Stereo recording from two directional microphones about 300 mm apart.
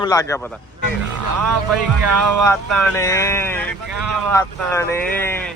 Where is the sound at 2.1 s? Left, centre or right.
Right.